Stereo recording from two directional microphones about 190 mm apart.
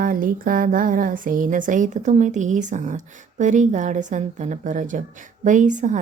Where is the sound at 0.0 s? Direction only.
45° right (ahead or behind).